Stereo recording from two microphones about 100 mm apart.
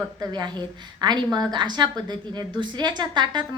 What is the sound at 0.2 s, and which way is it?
A woman's voice, 45° right (ahead or behind).